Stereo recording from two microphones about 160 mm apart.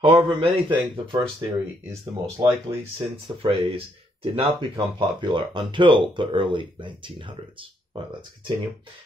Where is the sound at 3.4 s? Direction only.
35° right (ahead or behind).